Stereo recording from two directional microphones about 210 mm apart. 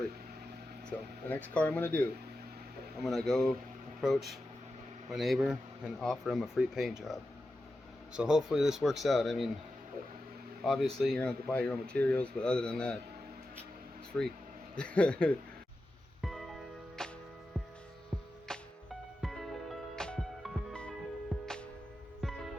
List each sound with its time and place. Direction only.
0.9 s speech: 5° left (ahead or behind)
10.6 s speech: centre (ahead or behind)
14.1 s speech: 5° left (ahead or behind)
16.2 s music: centre (ahead or behind)
18.5 s music: 5° left (ahead or behind)